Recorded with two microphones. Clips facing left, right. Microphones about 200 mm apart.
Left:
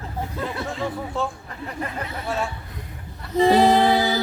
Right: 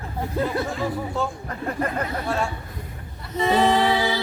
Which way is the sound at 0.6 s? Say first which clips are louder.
Right 1 dB; centre (ahead or behind).